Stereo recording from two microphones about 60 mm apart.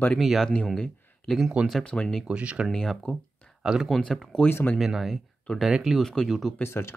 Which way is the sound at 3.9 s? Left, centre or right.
Centre.